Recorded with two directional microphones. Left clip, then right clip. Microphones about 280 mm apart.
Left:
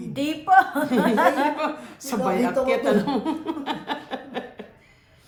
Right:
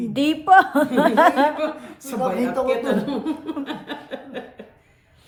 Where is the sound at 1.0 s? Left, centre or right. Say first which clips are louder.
Right 4 dB; right.